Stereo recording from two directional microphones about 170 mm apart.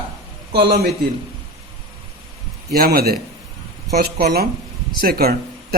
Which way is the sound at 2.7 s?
65° right (ahead or behind).